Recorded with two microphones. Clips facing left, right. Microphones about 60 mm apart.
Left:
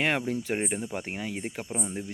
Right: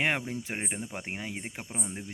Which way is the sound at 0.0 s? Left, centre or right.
Centre.